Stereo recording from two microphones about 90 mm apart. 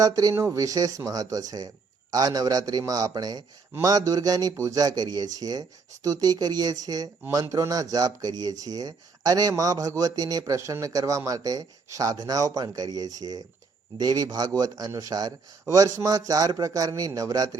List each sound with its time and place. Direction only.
0.0 s a man's voice: 40° right (ahead or behind)